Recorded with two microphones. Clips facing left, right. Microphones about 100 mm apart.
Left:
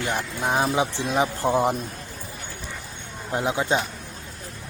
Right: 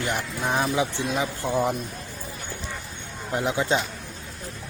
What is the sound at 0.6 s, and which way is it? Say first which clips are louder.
Speech: left 1 dB; 25° left (ahead or behind).